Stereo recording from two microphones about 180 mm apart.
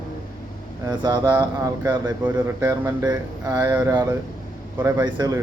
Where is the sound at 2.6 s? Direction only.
15° right (ahead or behind).